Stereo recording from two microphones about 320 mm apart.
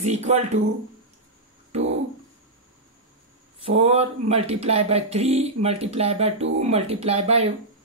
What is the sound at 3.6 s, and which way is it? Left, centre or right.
Speech, centre.